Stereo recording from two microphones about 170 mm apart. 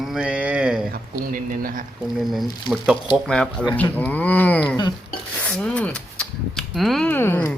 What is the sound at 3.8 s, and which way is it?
Speech, 10° left (ahead or behind).